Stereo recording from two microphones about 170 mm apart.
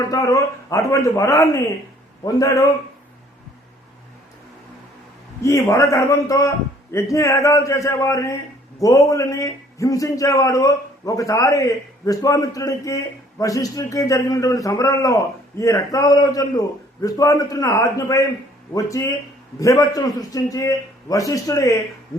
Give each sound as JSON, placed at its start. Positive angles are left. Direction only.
{"t": 0.1, "sound": "a man's voice", "side_deg": 20}
{"t": 5.4, "sound": "a man's voice", "side_deg": 15}